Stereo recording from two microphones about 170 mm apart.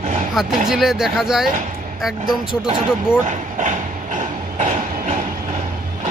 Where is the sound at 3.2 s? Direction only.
45° right (ahead or behind).